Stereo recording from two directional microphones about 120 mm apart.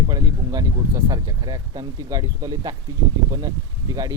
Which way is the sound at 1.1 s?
30° right (ahead or behind).